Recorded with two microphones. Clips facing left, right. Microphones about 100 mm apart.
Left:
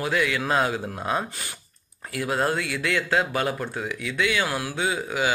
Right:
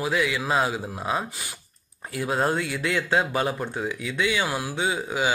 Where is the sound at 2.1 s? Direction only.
25° right (ahead or behind).